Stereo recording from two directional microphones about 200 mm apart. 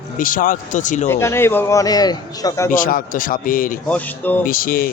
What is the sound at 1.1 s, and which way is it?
A man's voice, 10° left (ahead or behind).